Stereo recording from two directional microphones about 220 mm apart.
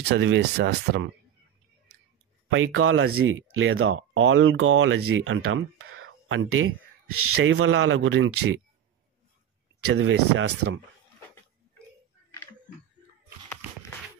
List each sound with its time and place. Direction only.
0.1 s speech: 50° right (ahead or behind)
2.5 s speech: 65° right (ahead or behind)
9.9 s speech: 75° right (ahead or behind)